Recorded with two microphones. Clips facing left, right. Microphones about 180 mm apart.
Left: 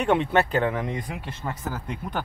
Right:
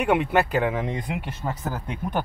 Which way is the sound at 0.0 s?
5° right (ahead or behind).